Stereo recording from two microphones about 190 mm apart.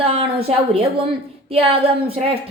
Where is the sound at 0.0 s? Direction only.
30° right (ahead or behind).